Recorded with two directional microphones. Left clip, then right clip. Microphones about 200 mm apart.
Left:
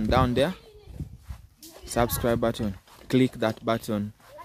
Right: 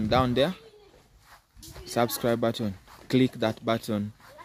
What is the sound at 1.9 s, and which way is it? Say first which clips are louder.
Speech: left 1 dB; 5° left (ahead or behind).